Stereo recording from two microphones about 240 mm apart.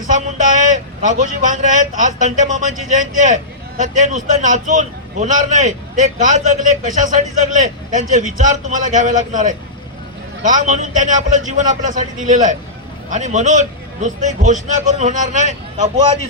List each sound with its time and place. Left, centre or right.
0.1 s a man's voice: right